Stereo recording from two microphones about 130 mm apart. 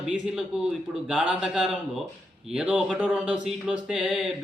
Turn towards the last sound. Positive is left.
turn(degrees=-5)  # may be behind; listen again after turning